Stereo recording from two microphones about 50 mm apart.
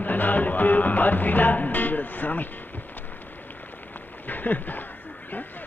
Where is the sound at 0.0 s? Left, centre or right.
Left.